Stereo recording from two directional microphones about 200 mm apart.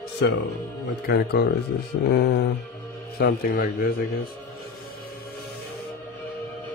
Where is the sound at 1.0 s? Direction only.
50° left (ahead or behind).